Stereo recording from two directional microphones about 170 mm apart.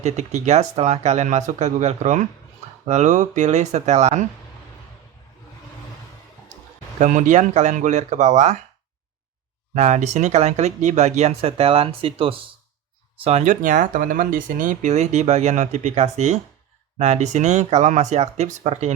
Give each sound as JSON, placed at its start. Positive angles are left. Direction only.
{"t": 0.0, "sound": "speech", "side_deg": -45}
{"t": 7.0, "sound": "speech", "side_deg": -45}
{"t": 9.7, "sound": "speech", "side_deg": -45}